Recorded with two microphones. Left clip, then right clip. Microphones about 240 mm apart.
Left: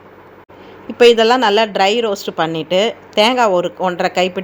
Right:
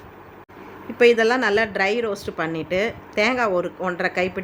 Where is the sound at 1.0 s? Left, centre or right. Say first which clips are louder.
Left 7 dB; centre.